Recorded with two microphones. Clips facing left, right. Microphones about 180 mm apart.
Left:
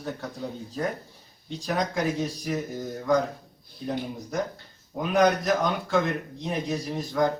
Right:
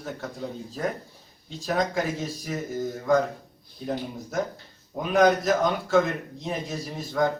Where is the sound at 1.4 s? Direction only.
Centre (ahead or behind).